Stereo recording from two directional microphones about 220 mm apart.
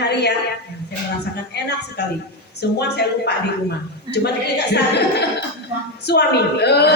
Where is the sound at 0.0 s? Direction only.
50° left (ahead or behind).